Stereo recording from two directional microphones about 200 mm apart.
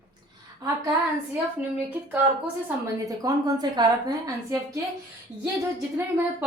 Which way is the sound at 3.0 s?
20° right (ahead or behind).